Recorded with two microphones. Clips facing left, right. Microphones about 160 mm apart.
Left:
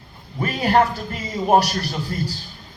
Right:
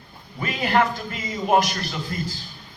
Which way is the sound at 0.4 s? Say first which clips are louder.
Left 3 dB; 40° left (ahead or behind).